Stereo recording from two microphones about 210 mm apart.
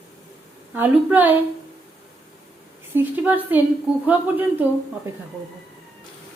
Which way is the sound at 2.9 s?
10° right (ahead or behind).